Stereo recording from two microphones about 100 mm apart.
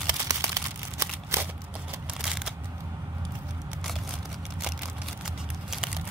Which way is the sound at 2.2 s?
5° right (ahead or behind).